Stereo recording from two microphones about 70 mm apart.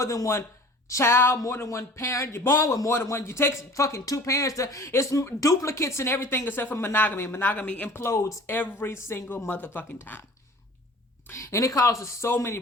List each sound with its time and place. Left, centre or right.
0.0 s a man's voice: left
2.6 s a man's voice: left
3.6 s speech: left
7.9 s speech: left
8.5 s a man's voice: left
11.3 s speech: left